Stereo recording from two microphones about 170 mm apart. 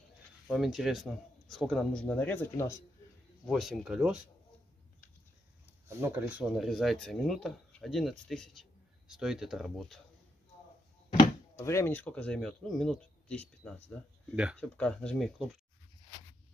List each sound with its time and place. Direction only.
0.5 s speech: centre (ahead or behind); by 2.8 s 15° left (ahead or behind)
3.4 s speech: centre (ahead or behind)
5.9 s speech: 15° right (ahead or behind); by 10.0 s centre (ahead or behind)
11.5 s speech: 15° left (ahead or behind)
14.3 s speech: 5° right (ahead or behind)
14.6 s speech: 5° left (ahead or behind)